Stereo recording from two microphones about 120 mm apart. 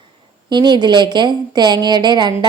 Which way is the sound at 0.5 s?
40° right (ahead or behind).